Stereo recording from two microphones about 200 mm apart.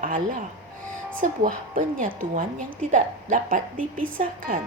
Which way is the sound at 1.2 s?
40° right (ahead or behind).